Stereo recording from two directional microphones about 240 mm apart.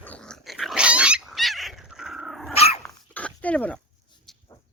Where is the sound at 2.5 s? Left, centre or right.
Left.